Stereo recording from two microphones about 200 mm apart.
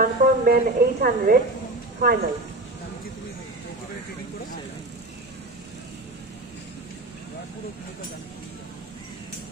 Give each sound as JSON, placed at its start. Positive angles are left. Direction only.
{"t": 0.0, "sound": "speech", "side_deg": -45}